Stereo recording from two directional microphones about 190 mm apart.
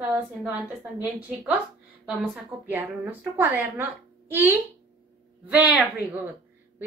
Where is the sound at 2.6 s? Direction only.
10° right (ahead or behind).